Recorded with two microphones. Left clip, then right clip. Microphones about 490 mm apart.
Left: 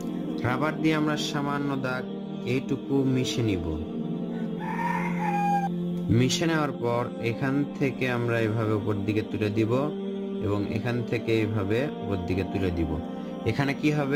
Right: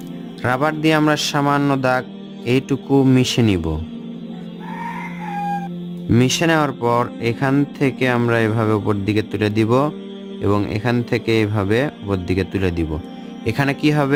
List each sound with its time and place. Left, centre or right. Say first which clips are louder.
0.4 s speech: right 9 dB; centre
6.1 s music: right 9 dB; centre